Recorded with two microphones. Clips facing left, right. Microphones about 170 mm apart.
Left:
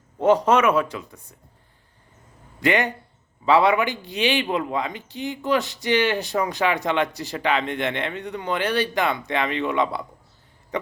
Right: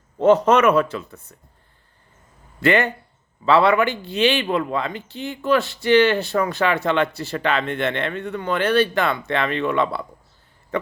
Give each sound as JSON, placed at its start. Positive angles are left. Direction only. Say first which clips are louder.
{"t": 0.2, "sound": "speech", "louder": "right 3 dB", "side_deg": 10}
{"t": 2.6, "sound": "speech", "louder": "right 3 dB", "side_deg": 15}